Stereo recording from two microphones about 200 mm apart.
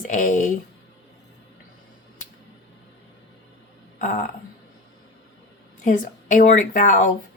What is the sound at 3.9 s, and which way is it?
Speech, 40° left (ahead or behind).